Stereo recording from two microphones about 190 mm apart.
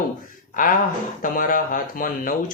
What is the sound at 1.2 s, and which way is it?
Speech, 45° left (ahead or behind).